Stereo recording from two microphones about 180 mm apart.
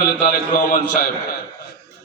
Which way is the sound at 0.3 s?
50° left (ahead or behind).